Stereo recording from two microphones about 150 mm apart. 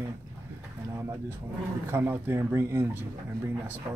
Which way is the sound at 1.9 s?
15° right (ahead or behind).